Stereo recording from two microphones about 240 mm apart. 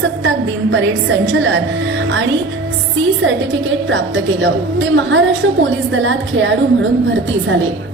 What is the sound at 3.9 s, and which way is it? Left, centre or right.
A woman's voice, right.